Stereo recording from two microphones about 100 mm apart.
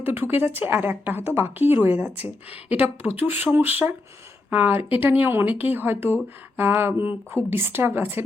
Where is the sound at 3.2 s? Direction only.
20° right (ahead or behind).